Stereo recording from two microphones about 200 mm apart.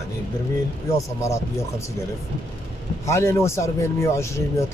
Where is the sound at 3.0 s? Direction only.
15° left (ahead or behind).